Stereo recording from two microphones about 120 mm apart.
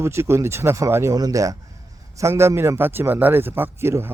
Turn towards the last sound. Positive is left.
turn(degrees=-20)  # may be behind; listen again after turning